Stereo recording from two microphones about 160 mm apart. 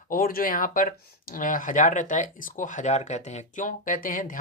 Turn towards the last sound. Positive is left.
turn(degrees=55)  # may be behind; listen again after turning